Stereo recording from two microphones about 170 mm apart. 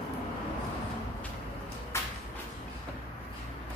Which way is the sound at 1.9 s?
15° left (ahead or behind).